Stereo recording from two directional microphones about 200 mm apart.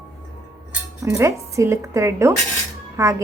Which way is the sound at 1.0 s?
15° right (ahead or behind).